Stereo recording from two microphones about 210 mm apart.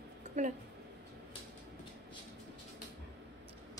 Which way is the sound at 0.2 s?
35° right (ahead or behind).